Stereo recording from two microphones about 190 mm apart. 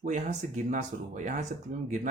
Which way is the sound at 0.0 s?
40° right (ahead or behind).